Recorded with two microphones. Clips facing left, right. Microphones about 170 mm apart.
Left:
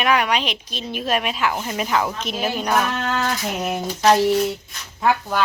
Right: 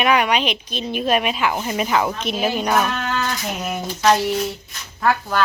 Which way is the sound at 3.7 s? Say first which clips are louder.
Left 1 dB; 30° left (ahead or behind).